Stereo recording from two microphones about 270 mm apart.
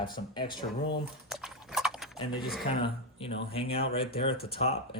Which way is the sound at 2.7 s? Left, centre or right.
Centre.